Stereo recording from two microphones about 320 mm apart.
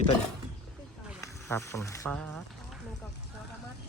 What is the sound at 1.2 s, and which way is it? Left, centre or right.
Speech, centre.